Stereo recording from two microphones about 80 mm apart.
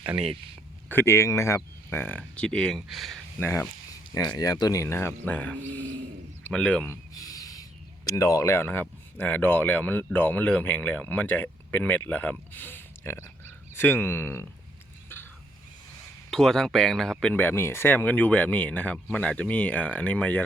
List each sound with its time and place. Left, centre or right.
0.9 s speech: left; by 3.2 s centre
3.4 s speech: left
4.4 s speech: left
4.8 s speech: left
5.2 s speech: centre
7.1 s speech: left
15.1 s a sound: left
16.3 s speech: centre
17.3 s speech: left